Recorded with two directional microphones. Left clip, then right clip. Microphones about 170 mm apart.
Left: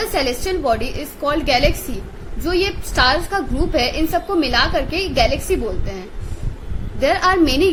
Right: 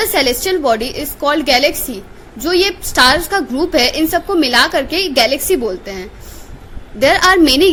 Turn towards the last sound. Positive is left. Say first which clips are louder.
# right 5 dB
turn(degrees=-45)  # may be behind; listen again after turning